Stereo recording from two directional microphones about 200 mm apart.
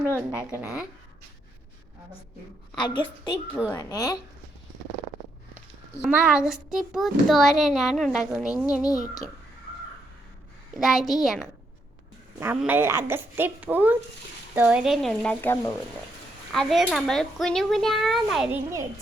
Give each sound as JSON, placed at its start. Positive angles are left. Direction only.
{"t": 0.1, "sound": "speech", "side_deg": 10}
{"t": 0.5, "sound": "speech", "side_deg": -5}
{"t": 2.7, "sound": "a woman's voice", "side_deg": 25}
{"t": 6.0, "sound": "a child's voice", "side_deg": -5}
{"t": 10.8, "sound": "a child's voice", "side_deg": 0}
{"t": 18.5, "sound": "speech", "side_deg": -15}